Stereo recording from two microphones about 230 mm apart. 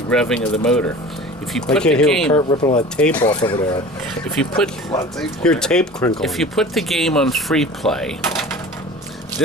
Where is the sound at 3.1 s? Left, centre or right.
Centre.